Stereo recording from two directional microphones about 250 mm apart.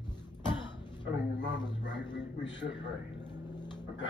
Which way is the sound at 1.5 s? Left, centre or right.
Centre.